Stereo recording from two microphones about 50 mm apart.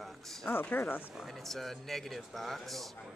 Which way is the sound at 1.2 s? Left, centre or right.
Centre.